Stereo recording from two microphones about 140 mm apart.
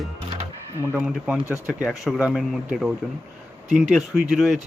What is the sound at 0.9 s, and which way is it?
Speech, 5° right (ahead or behind).